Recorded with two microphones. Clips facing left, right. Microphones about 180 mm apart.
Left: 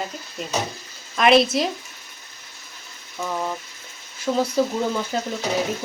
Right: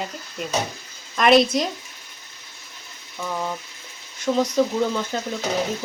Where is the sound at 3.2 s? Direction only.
5° left (ahead or behind).